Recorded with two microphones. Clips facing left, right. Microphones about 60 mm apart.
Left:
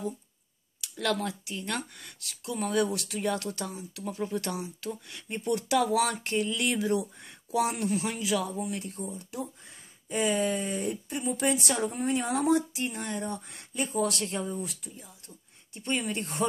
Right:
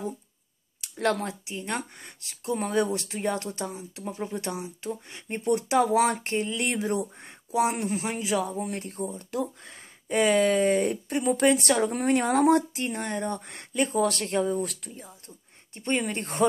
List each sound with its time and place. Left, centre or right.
0.7 s speech: right
9.4 s speech: right
14.4 s speech: right